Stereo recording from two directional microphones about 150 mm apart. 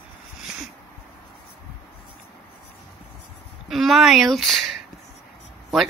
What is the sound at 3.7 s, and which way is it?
Speech, centre (ahead or behind).